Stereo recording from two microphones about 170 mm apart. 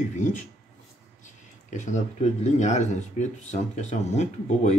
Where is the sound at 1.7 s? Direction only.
45° left (ahead or behind).